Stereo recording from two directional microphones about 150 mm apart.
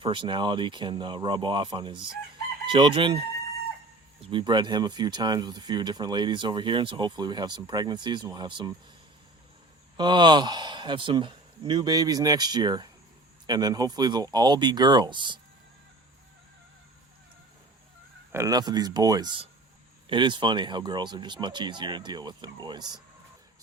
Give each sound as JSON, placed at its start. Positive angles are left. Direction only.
{"t": 0.0, "sound": "speech", "side_deg": -35}
{"t": 4.3, "sound": "speech", "side_deg": -30}
{"t": 10.0, "sound": "speech", "side_deg": -30}
{"t": 18.3, "sound": "speech", "side_deg": -20}